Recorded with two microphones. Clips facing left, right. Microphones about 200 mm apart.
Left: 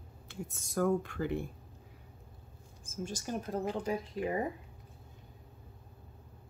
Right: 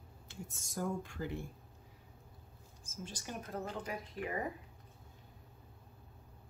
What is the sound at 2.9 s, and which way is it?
Speech, 45° left (ahead or behind).